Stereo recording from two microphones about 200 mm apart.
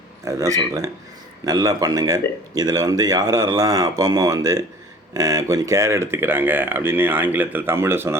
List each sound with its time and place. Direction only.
0.3 s speech: 15° right (ahead or behind)